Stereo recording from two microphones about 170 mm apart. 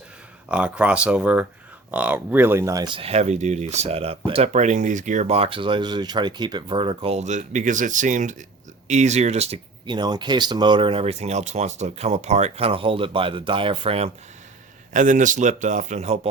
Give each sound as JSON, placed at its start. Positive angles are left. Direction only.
{"t": 0.4, "sound": "speech", "side_deg": -5}
{"t": 9.8, "sound": "speech", "side_deg": -25}
{"t": 14.9, "sound": "a man's voice", "side_deg": -50}